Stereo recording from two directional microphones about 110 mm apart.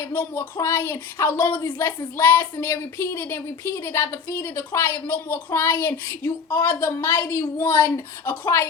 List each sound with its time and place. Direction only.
0.0 s speech: 25° left (ahead or behind)